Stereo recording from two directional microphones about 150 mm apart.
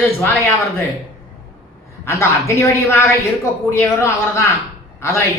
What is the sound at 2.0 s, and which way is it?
Speech, 20° left (ahead or behind).